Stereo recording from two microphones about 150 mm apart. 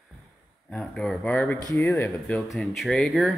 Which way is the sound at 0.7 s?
5° left (ahead or behind).